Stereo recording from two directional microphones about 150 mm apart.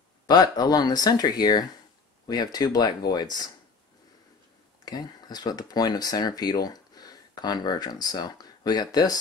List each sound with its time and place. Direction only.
0.3 s speech: 25° left (ahead or behind)
4.8 s speech: 25° left (ahead or behind)